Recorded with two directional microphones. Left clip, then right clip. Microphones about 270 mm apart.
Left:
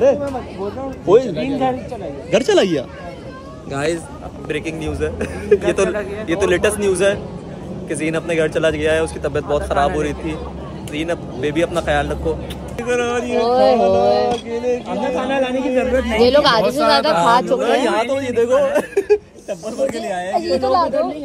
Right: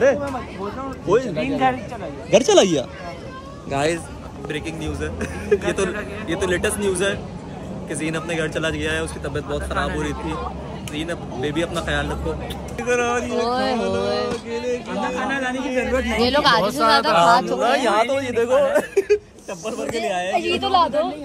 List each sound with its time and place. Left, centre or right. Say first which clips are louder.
0.0 s speech: left 3 dB; centre
20.6 s speech: left 1 dB; right